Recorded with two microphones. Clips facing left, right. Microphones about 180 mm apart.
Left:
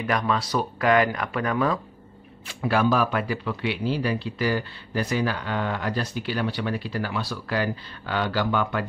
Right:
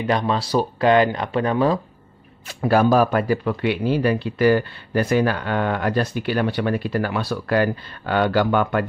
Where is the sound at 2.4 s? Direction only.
40° right (ahead or behind).